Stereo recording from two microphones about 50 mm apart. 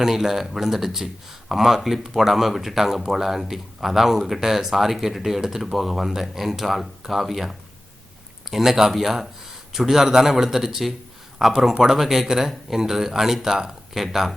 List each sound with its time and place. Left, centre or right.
0.0 s speech: centre